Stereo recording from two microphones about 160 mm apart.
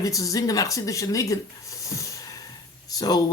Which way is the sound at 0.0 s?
20° left (ahead or behind).